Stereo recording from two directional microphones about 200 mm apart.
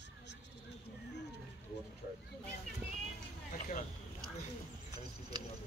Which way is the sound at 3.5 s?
40° left (ahead or behind).